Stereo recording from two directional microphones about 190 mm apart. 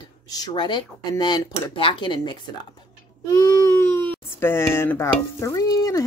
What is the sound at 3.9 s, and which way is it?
Stir, 10° left (ahead or behind).